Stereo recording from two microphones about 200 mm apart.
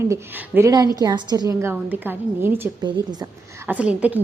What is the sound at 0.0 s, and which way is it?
A woman's voice, 15° right (ahead or behind).